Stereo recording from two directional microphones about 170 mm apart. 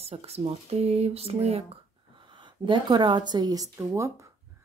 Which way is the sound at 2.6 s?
25° right (ahead or behind).